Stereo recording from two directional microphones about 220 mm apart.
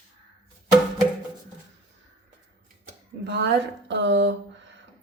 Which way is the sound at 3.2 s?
50° right (ahead or behind).